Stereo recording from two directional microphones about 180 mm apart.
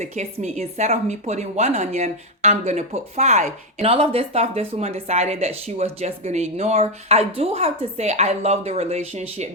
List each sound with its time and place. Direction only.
0.0 s a woman's voice: 40° right (ahead or behind)